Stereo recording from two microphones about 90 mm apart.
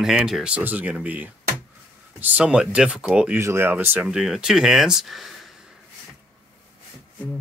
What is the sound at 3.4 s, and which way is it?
Speech, 30° right (ahead or behind).